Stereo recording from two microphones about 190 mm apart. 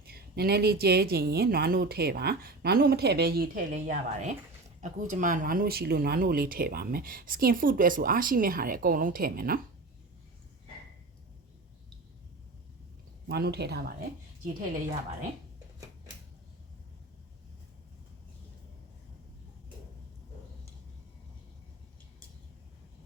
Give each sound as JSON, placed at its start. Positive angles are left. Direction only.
{"t": 0.0, "sound": "speech", "side_deg": -55}
{"t": 13.2, "sound": "speech", "side_deg": -55}